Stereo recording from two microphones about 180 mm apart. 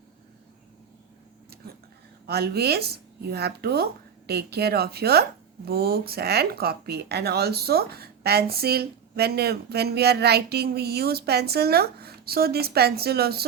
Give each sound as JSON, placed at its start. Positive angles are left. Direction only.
{"t": 2.2, "sound": "speech", "side_deg": -60}